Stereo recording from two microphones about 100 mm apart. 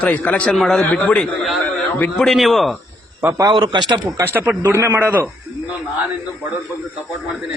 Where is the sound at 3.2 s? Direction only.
30° right (ahead or behind).